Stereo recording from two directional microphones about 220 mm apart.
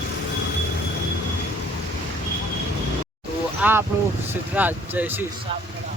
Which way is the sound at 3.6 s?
5° right (ahead or behind).